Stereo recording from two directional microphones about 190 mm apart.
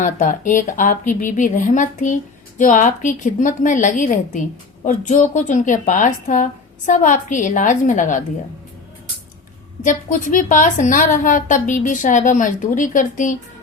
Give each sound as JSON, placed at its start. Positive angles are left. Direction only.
{"t": 0.0, "sound": "a woman's voice", "side_deg": 40}
{"t": 9.8, "sound": "a woman's voice", "side_deg": 40}